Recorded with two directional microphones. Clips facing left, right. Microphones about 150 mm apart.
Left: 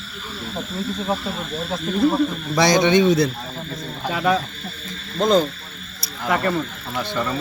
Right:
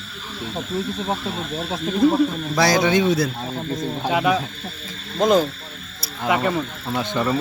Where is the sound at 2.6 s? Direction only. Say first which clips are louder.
Left 2 dB; 5° right (ahead or behind).